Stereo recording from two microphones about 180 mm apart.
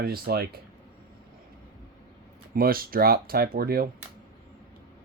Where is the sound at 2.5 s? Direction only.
55° right (ahead or behind).